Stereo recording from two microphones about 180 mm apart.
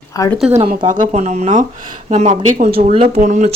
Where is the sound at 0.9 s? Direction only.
45° right (ahead or behind).